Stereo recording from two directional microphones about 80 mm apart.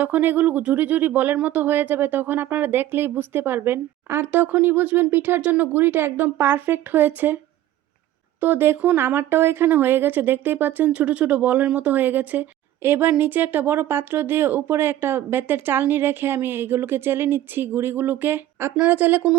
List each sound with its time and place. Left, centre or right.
0.0 s speech: right
8.4 s speech: right